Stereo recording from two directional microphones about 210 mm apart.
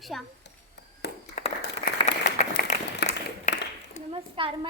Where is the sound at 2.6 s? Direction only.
45° left (ahead or behind).